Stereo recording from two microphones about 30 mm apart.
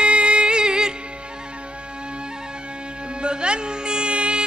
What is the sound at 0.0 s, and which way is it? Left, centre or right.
Music, right.